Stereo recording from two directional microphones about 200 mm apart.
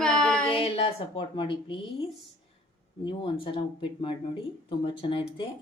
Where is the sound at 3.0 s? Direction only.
25° left (ahead or behind).